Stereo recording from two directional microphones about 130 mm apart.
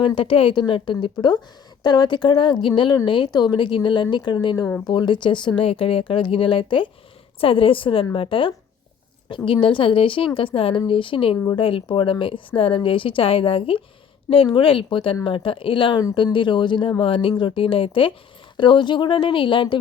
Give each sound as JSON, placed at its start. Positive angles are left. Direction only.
{"t": 0.0, "sound": "a woman's voice", "side_deg": 40}